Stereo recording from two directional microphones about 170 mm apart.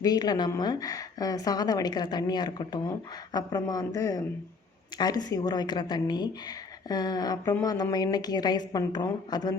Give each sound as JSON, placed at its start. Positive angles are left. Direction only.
{"t": 0.0, "sound": "a woman's voice", "side_deg": 25}